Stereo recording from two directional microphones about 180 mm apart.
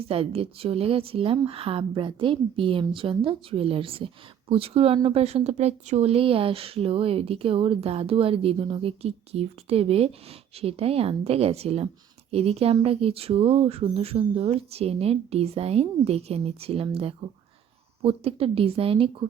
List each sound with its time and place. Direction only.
0.1 s speech: 30° right (ahead or behind)